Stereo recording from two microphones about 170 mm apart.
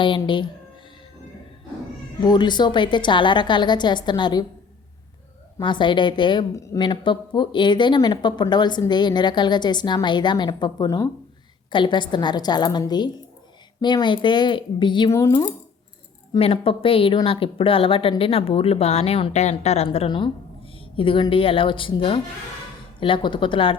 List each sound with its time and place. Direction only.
0.0 s a woman's voice: 30° left (ahead or behind)
2.2 s a woman's voice: 25° left (ahead or behind)
5.5 s a woman's voice: 30° left (ahead or behind)
11.7 s a woman's voice: 30° left (ahead or behind)
15.1 s speech: 15° left (ahead or behind)
16.4 s a woman's voice: 35° left (ahead or behind)